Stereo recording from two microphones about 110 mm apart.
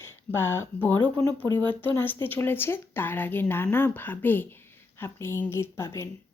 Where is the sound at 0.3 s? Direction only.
20° left (ahead or behind).